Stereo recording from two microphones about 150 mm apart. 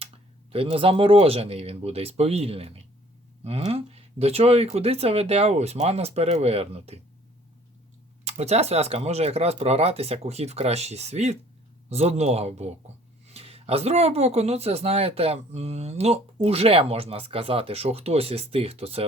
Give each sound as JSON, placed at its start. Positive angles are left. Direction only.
{"t": 0.5, "sound": "speech", "side_deg": -40}
{"t": 8.2, "sound": "speech", "side_deg": -45}